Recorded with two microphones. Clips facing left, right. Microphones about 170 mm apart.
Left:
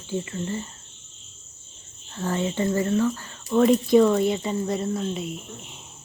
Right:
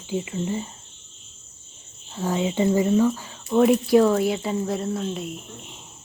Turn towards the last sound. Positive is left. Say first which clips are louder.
# left 1 dB
turn(degrees=0)  # may be behind; listen again after turning